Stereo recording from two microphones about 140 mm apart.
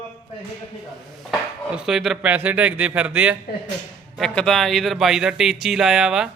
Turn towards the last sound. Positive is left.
turn(degrees=-5)  # may be behind; listen again after turning